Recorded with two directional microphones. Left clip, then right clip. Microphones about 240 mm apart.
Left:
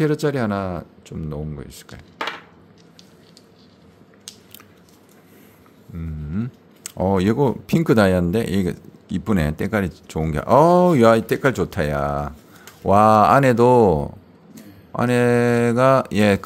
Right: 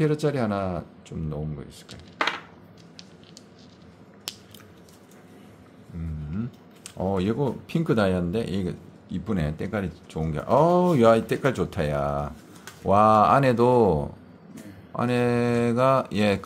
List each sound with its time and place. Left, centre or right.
0.0 s speech: left
6.3 s speech: left